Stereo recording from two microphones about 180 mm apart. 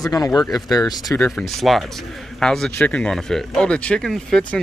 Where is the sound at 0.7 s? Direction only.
20° left (ahead or behind).